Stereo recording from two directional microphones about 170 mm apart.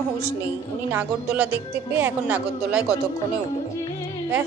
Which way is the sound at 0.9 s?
10° right (ahead or behind).